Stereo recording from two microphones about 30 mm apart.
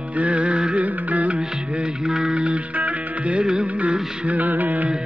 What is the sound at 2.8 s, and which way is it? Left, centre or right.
Music, right.